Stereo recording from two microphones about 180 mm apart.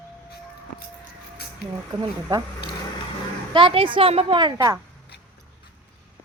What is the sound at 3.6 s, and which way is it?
A woman's voice, 30° right (ahead or behind).